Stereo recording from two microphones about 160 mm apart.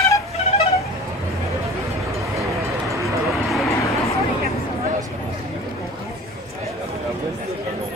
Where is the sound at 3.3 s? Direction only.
Centre (ahead or behind).